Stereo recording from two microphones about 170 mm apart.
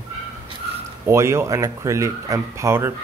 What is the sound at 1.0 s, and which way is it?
Speech, 15° right (ahead or behind).